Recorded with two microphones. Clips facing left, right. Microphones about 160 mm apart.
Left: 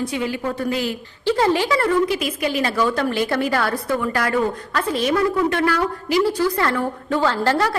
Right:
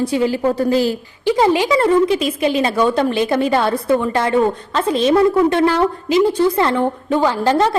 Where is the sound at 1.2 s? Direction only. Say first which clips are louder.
Right 4 dB; 15° right (ahead or behind).